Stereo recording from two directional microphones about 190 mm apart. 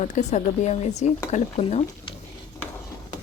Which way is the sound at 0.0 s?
35° left (ahead or behind).